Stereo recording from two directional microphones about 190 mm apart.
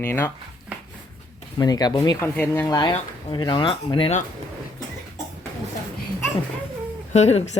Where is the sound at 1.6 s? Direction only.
20° left (ahead or behind).